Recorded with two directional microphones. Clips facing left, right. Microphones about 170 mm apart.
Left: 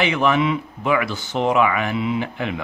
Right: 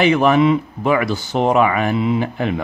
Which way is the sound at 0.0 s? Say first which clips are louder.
Right 5 dB; 40° right (ahead or behind).